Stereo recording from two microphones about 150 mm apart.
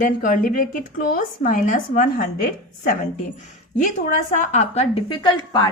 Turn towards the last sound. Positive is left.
turn(degrees=30)  # may be behind; listen again after turning